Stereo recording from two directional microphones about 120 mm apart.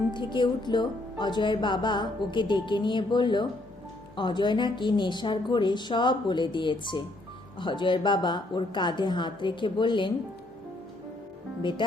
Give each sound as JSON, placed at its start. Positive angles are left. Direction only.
{"t": 0.1, "sound": "speech", "side_deg": 40}